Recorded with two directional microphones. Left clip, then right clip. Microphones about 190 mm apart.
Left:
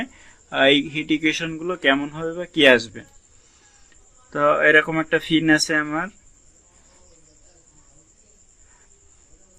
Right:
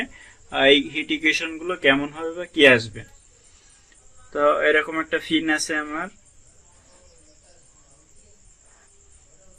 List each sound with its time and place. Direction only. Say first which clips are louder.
0.0 s a man's voice: right 1 dB; 30° left (ahead or behind)
4.3 s a man's voice: left 2 dB; 35° left (ahead or behind)